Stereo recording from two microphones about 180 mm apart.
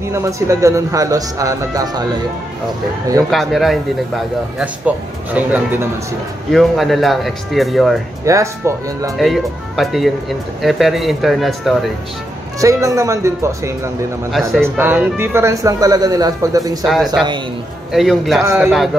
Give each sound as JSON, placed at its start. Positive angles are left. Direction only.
{"t": 0.1, "sound": "speech", "side_deg": -15}
{"t": 3.3, "sound": "speech", "side_deg": 0}
{"t": 6.5, "sound": "speech", "side_deg": 0}
{"t": 8.3, "sound": "speech", "side_deg": -15}
{"t": 9.2, "sound": "speech", "side_deg": 0}
{"t": 12.5, "sound": "speech", "side_deg": -15}
{"t": 16.8, "sound": "speech", "side_deg": 0}
{"t": 18.4, "sound": "speech", "side_deg": -15}